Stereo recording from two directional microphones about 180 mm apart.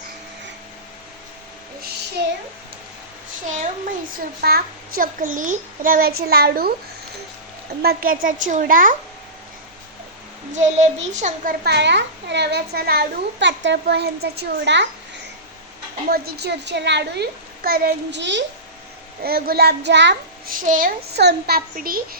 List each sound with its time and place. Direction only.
2.2 s a child's voice: 65° right (ahead or behind)
4.1 s a child's voice: 55° right (ahead or behind)
7.8 s a woman's voice: 55° right (ahead or behind)
10.5 s a child's voice: 40° right (ahead or behind)
11.6 s a child's voice: 70° right (ahead or behind)
16.0 s a child's voice: 60° right (ahead or behind)
18.2 s a child's voice: 80° right
19.2 s a child's voice: 60° right (ahead or behind); by 20.1 s 75° right (ahead or behind)
20.5 s a woman's voice: 50° right (ahead or behind)
21.2 s a child's voice: 65° right (ahead or behind)